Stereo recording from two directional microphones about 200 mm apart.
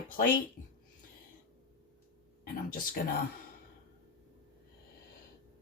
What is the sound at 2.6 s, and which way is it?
Speech, 45° left (ahead or behind).